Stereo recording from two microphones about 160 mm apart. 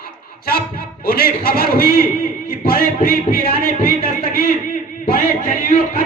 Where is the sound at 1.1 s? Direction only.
70° left (ahead or behind).